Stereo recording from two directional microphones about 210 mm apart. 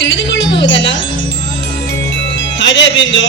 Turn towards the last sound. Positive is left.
turn(degrees=60)  # may be behind; listen again after turning